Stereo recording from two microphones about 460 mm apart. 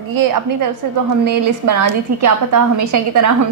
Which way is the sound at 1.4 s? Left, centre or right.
Right.